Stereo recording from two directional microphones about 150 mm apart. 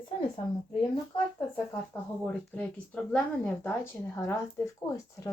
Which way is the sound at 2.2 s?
10° left (ahead or behind).